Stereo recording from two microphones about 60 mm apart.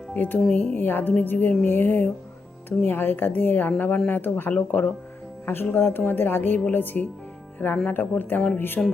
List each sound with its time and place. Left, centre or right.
0.1 s a woman's voice: left
4.5 s speech: left
5.7 s a woman's voice: left